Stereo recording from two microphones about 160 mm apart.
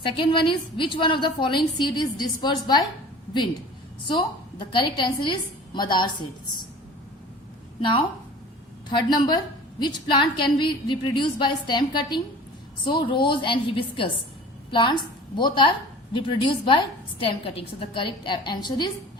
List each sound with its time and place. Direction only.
0.0 s a woman's voice: 30° left (ahead or behind)
4.0 s a woman's voice: 30° left (ahead or behind)
7.8 s a woman's voice: 30° left (ahead or behind)